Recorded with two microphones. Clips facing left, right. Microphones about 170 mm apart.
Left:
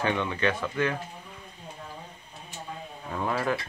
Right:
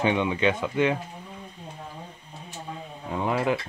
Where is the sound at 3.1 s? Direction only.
20° right (ahead or behind).